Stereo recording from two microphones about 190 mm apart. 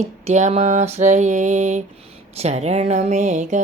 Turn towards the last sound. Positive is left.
turn(degrees=-40)  # may be behind; listen again after turning